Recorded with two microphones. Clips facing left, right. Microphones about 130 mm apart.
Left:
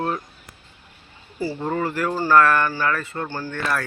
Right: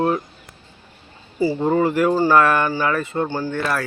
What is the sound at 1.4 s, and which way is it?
Speech, 15° right (ahead or behind).